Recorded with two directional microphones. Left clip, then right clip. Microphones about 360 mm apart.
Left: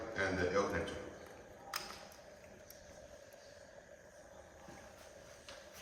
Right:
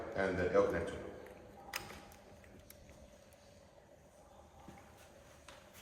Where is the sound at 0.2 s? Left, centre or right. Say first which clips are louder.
Right 3 dB; centre.